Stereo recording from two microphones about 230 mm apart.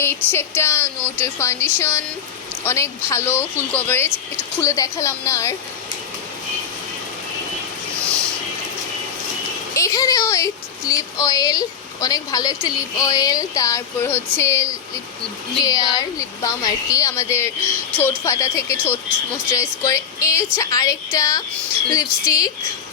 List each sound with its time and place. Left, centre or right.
0.0 s speech: centre
9.7 s speech: centre